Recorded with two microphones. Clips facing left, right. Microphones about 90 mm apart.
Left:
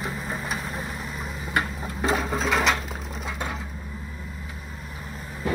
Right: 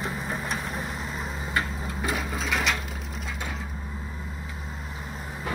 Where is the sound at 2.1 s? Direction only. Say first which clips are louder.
Left 6 dB; 35° left (ahead or behind).